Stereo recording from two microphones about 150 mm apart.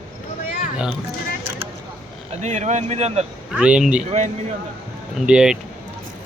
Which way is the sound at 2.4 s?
50° right (ahead or behind).